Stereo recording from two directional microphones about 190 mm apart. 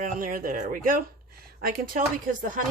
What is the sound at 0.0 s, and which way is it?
A woman's voice, 45° right (ahead or behind).